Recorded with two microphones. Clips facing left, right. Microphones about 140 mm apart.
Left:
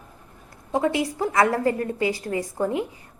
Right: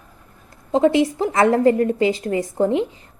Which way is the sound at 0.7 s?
25° right (ahead or behind).